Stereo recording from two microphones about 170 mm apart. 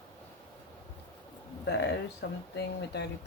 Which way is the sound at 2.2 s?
90° left.